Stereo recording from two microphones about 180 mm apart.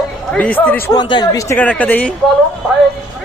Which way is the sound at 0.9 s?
25° left (ahead or behind).